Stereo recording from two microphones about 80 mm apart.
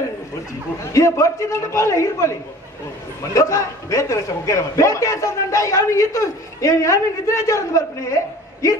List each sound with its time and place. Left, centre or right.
0.9 s a man's voice: left